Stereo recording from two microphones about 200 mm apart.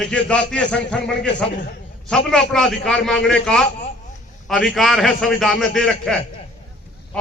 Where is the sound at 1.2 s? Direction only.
60° left (ahead or behind).